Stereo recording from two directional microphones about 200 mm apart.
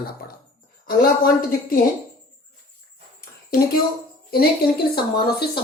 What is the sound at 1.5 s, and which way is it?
Speech, 45° left (ahead or behind).